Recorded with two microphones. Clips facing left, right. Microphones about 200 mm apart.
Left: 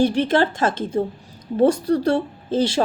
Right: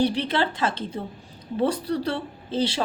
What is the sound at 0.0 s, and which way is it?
Speech, 45° left (ahead or behind).